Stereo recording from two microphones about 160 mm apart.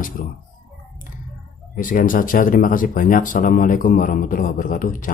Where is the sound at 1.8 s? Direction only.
60° left (ahead or behind).